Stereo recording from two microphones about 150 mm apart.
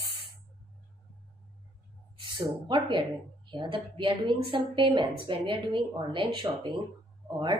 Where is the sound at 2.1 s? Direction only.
30° right (ahead or behind).